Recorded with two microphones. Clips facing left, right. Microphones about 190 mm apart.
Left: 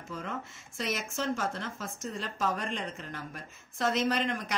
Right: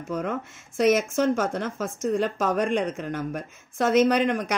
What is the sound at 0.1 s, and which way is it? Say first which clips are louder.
A woman's voice: right 10 dB; 60° right (ahead or behind).